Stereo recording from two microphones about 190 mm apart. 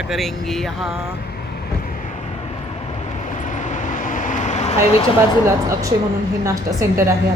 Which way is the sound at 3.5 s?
40° left (ahead or behind).